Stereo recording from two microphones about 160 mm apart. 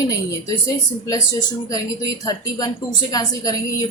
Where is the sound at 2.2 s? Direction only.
25° left (ahead or behind).